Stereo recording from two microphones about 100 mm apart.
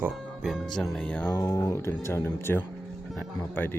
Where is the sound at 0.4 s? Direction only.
5° right (ahead or behind).